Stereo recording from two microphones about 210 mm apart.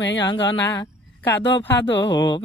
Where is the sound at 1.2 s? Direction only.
10° left (ahead or behind).